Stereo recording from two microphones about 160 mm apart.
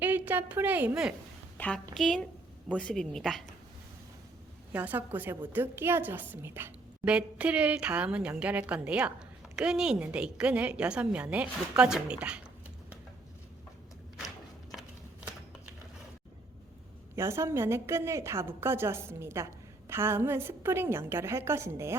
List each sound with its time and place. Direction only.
0.0 s a woman's voice: 10° right (ahead or behind)
1.5 s a woman's voice: 10° left (ahead or behind)
4.7 s a woman's voice: 10° right (ahead or behind)
17.2 s a woman's voice: 15° right (ahead or behind)